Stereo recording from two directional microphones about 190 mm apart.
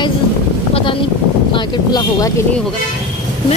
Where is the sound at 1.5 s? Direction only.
20° left (ahead or behind).